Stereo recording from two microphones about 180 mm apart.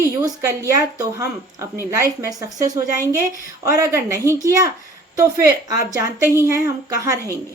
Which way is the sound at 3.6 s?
15° right (ahead or behind).